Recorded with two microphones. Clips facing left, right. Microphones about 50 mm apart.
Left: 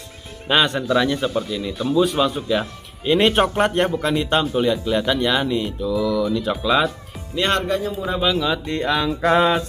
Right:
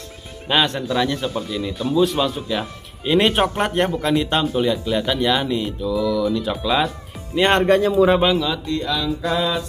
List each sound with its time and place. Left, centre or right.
0.5 s speech: centre
7.3 s speech: right
7.6 s speech: right
8.6 s music: left